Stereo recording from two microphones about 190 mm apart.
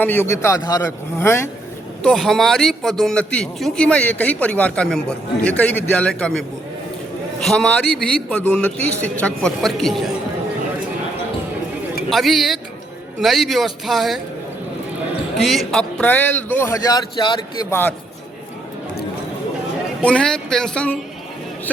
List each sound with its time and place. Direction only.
0.0 s a man's voice: 10° left (ahead or behind)
2.0 s a man's voice: centre (ahead or behind)
7.4 s a man's voice: 5° left (ahead or behind)
12.1 s a man's voice: centre (ahead or behind)
15.4 s a man's voice: centre (ahead or behind)
20.1 s a man's voice: 5° left (ahead or behind)